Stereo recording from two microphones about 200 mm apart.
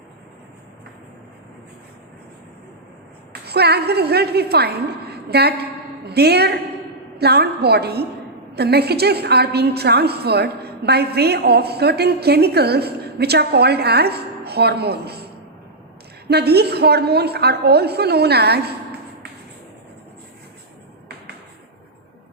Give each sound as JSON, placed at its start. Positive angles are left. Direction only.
{"t": 3.4, "sound": "a woman's voice", "side_deg": -55}
{"t": 16.3, "sound": "a woman's voice", "side_deg": -55}